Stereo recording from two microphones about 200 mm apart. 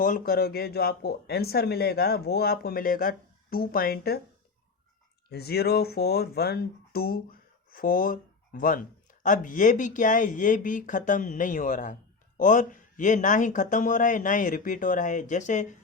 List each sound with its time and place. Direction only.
0.0 s speech: 45° left (ahead or behind)
5.3 s speech: 50° left (ahead or behind); by 15.6 s 35° left (ahead or behind)